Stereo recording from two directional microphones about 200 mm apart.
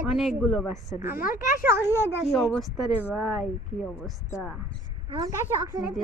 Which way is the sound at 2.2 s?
Centre (ahead or behind).